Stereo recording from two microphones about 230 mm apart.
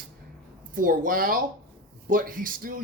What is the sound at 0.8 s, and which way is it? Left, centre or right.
Speech, right.